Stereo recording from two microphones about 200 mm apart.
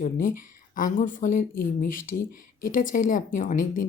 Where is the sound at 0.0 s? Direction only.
40° left (ahead or behind).